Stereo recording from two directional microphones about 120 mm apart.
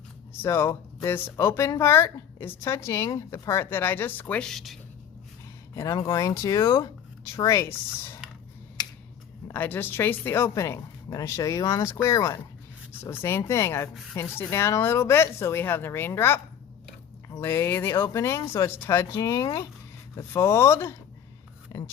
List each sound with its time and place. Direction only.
0.4 s speech: 20° left (ahead or behind); by 4.8 s centre (ahead or behind)
5.7 s speech: 25° left (ahead or behind)
8.8 s finger snapping: 35° left (ahead or behind)
9.5 s speech: 15° left (ahead or behind)